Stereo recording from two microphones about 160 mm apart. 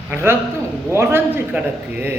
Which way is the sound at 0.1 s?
15° right (ahead or behind).